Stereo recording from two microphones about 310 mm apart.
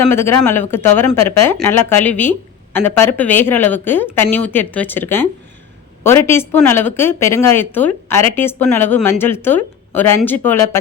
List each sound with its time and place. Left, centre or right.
0.1 s speech: centre